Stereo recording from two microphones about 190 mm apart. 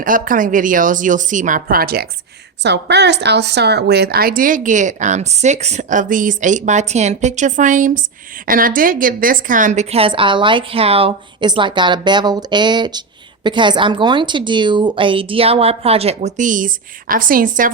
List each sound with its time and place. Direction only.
0.0 s speech: 45° right (ahead or behind)
2.6 s a woman's voice: 65° right (ahead or behind); by 17.7 s 45° right (ahead or behind)